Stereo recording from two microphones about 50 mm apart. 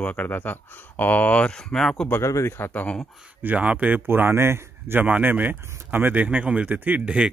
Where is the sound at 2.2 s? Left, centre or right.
Left.